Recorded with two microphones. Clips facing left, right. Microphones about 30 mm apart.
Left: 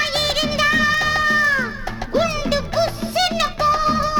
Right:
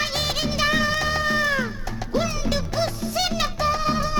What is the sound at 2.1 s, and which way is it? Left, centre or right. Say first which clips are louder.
Music: left 5 dB; left.